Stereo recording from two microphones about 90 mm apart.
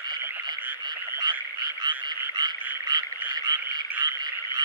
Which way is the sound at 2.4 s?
50° right (ahead or behind).